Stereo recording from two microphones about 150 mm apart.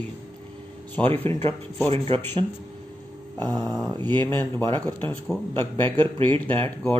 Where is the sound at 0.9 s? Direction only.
15° left (ahead or behind).